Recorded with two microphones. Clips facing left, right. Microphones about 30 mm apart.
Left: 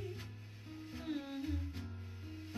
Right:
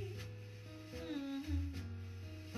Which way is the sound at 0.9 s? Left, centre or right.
Centre.